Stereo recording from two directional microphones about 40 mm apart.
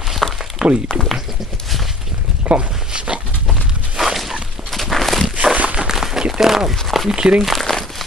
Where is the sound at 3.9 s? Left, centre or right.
Centre.